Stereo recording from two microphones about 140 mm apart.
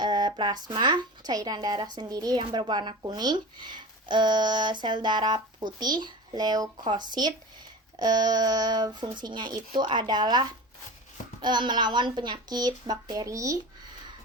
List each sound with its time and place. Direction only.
0.0 s speech: 30° right (ahead or behind)